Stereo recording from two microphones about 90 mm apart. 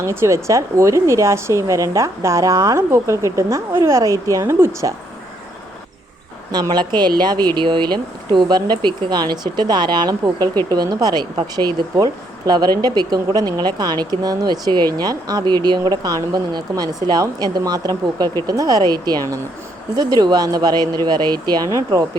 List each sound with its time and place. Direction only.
0.0 s a woman's voice: 30° right (ahead or behind)
6.5 s speech: 50° right (ahead or behind)